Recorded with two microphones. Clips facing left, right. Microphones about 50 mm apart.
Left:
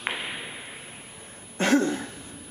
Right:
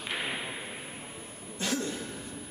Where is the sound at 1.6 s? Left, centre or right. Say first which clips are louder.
Left 10 dB; left.